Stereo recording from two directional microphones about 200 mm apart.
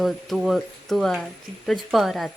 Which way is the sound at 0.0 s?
Centre (ahead or behind).